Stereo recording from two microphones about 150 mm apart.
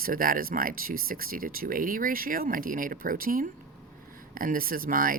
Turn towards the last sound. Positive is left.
turn(degrees=-70)  # may be behind; listen again after turning